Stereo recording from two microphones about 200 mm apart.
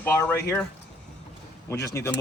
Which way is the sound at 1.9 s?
10° left (ahead or behind).